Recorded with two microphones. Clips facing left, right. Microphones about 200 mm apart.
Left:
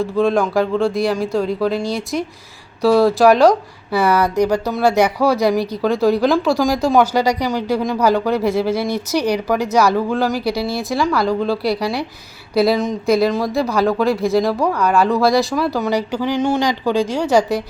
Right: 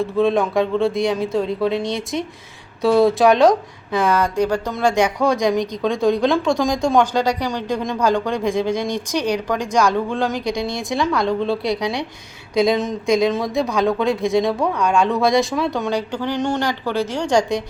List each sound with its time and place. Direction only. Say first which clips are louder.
0.0 s speech: left 1 dB; centre (ahead or behind)